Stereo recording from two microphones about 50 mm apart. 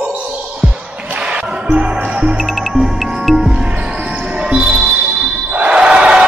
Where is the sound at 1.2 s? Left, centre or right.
Right.